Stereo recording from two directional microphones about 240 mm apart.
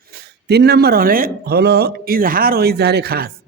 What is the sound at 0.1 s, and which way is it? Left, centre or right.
Speech, right.